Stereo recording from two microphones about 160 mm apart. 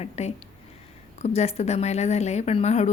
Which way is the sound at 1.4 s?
45° left (ahead or behind).